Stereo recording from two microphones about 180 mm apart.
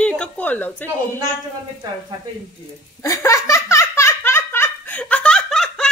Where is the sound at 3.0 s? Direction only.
15° left (ahead or behind).